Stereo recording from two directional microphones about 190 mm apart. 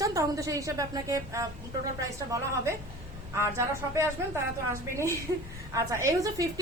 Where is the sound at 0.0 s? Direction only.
15° right (ahead or behind).